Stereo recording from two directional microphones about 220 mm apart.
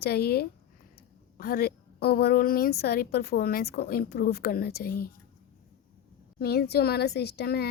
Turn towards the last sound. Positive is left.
turn(degrees=45)  # may be behind; listen again after turning